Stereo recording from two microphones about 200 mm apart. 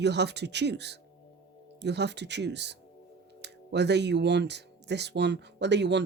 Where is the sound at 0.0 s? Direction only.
60° right (ahead or behind).